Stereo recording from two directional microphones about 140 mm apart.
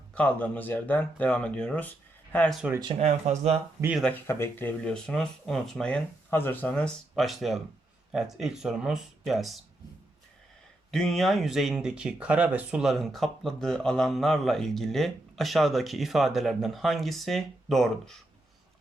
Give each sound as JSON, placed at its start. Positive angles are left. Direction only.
{"t": 0.1, "sound": "speech", "side_deg": 10}
{"t": 2.6, "sound": "speech", "side_deg": -10}
{"t": 3.0, "sound": "speech", "side_deg": -55}
{"t": 4.1, "sound": "speech", "side_deg": 15}
{"t": 10.9, "sound": "speech", "side_deg": 0}